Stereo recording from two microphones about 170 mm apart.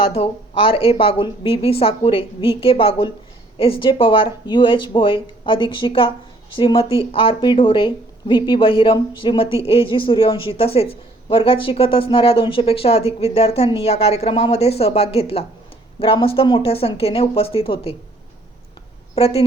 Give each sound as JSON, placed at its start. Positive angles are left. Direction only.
{"t": 0.1, "sound": "speech", "side_deg": 35}
{"t": 19.1, "sound": "speech", "side_deg": 35}